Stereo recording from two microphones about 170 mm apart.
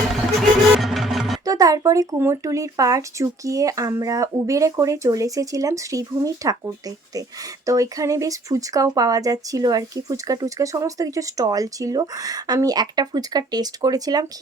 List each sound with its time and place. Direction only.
0.3 s music: centre (ahead or behind)
1.5 s speech: 20° right (ahead or behind)